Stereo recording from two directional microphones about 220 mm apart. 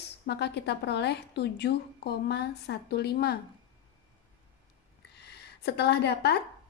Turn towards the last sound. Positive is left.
turn(degrees=50)  # may be behind; listen again after turning